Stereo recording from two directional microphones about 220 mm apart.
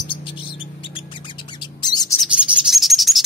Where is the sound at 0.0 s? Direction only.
20° left (ahead or behind).